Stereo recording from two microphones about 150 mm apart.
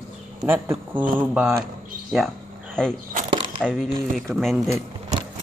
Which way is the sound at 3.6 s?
5° left (ahead or behind).